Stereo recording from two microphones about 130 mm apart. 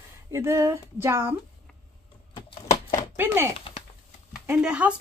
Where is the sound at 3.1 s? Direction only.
15° right (ahead or behind).